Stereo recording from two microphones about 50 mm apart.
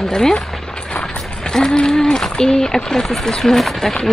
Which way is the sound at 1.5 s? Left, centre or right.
Centre.